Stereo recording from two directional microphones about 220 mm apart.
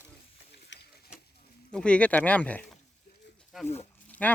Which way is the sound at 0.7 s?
55° left (ahead or behind).